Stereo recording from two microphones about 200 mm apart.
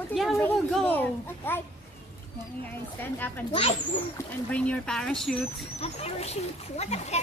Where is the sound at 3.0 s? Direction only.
10° left (ahead or behind).